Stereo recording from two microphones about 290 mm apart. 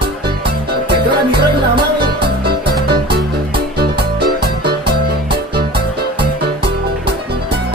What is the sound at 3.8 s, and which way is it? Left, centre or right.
Music, right.